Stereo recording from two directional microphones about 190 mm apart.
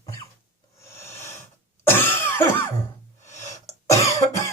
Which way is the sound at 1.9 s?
10° left (ahead or behind).